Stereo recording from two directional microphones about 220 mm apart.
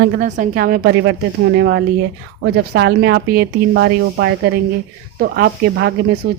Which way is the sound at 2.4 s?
45° right (ahead or behind).